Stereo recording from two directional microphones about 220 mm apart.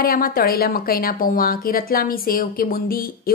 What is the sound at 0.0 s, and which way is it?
A woman's voice, 40° left (ahead or behind).